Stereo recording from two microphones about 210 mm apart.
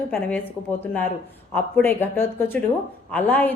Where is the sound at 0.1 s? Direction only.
10° left (ahead or behind).